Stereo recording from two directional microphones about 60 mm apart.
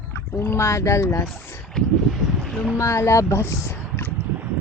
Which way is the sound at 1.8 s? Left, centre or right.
Centre.